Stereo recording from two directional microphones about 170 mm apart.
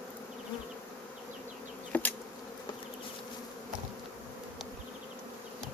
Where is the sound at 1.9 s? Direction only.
10° left (ahead or behind).